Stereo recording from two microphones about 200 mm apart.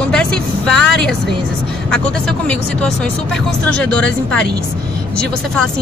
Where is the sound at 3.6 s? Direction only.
5° left (ahead or behind).